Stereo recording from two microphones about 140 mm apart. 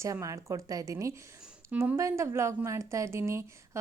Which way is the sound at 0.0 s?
25° right (ahead or behind).